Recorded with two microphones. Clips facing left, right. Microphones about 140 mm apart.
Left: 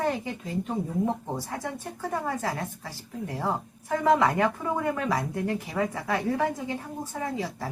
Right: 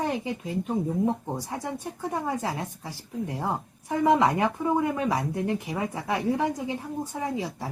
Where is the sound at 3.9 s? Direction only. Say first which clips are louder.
Right 1 dB; 20° right (ahead or behind).